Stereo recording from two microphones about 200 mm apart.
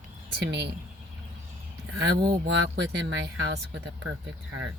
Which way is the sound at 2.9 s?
60° right (ahead or behind).